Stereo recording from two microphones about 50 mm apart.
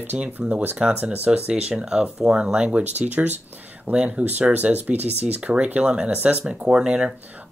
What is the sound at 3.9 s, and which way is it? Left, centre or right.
Speech, right.